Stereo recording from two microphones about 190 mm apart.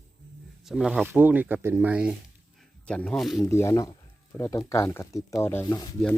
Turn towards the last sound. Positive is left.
turn(degrees=10)  # may be behind; listen again after turning